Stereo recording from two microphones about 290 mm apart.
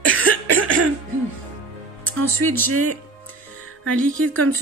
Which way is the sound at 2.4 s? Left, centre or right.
Right.